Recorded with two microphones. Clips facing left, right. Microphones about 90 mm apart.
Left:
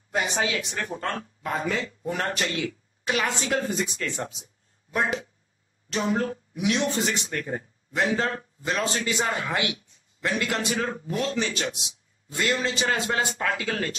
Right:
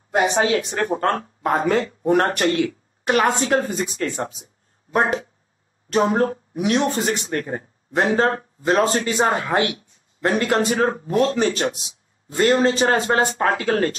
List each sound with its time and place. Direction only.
0.1 s speech: 45° right (ahead or behind)